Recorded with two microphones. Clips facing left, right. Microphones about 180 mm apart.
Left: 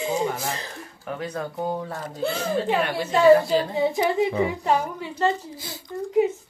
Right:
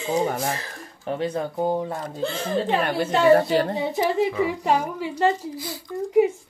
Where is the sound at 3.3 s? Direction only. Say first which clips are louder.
Left 1 dB; 65° right (ahead or behind).